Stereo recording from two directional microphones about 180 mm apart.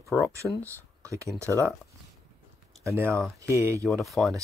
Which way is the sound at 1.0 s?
15° right (ahead or behind).